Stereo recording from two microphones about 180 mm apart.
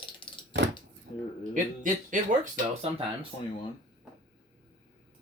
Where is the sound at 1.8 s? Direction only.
45° right (ahead or behind).